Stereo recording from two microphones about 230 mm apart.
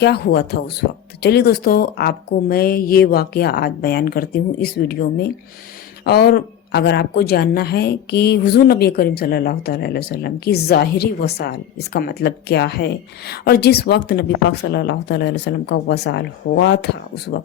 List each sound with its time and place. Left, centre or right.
0.0 s a woman's voice: left
6.1 s a woman's voice: left